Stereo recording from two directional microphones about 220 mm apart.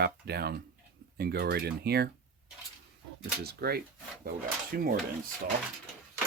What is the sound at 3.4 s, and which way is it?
Speech, 45° right (ahead or behind).